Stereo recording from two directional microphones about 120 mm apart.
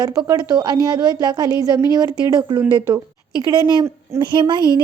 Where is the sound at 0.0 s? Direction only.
35° right (ahead or behind).